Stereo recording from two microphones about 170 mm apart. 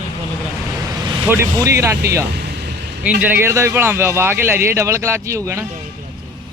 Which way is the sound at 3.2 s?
15° right (ahead or behind).